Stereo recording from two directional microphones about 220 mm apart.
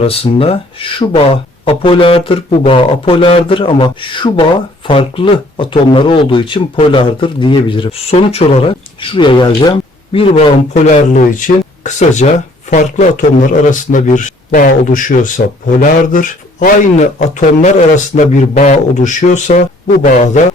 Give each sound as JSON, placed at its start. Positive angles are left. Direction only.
{"t": 0.0, "sound": "speech", "side_deg": 25}